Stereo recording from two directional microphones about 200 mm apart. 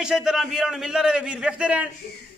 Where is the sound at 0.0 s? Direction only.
5° right (ahead or behind).